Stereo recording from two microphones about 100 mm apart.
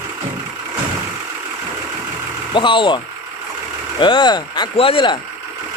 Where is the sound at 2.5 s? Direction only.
55° left (ahead or behind).